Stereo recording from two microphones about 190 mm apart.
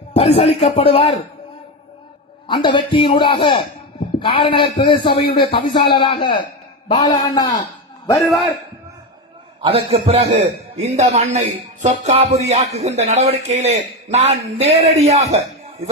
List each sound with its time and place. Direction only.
0.1 s a man's voice: 35° left (ahead or behind)
2.4 s a man's voice: 25° left (ahead or behind)
8.3 s a man's voice: centre (ahead or behind)
9.6 s a man's voice: 25° right (ahead or behind)